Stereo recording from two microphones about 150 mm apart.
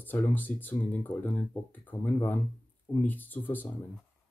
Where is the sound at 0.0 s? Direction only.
10° left (ahead or behind).